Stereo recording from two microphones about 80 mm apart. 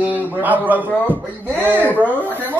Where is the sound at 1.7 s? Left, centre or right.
Left.